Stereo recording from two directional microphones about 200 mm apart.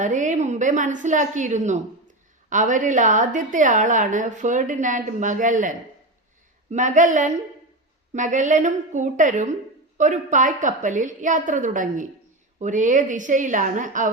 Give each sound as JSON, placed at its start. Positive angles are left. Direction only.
{"t": 0.0, "sound": "a woman's voice", "side_deg": -40}